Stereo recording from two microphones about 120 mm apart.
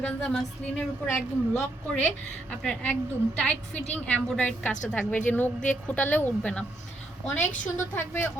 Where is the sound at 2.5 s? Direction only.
10° left (ahead or behind).